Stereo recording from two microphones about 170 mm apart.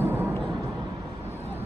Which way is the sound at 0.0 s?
10° right (ahead or behind).